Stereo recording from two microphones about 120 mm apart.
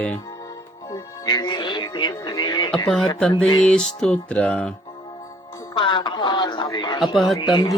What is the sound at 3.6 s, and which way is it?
Music, 5° left (ahead or behind).